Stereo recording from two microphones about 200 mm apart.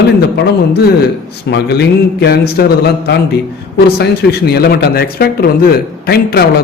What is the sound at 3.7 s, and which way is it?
A man's voice, 55° left (ahead or behind).